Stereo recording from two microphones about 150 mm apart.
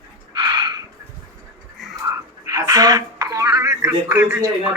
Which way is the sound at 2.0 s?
20° right (ahead or behind).